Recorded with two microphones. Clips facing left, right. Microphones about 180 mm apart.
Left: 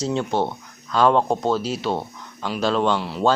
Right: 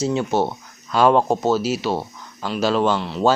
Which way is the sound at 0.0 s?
5° right (ahead or behind).